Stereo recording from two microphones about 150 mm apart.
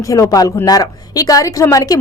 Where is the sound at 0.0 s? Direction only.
20° left (ahead or behind).